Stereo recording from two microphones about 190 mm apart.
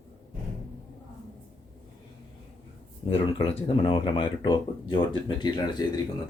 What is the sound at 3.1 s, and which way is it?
Speech, 30° left (ahead or behind).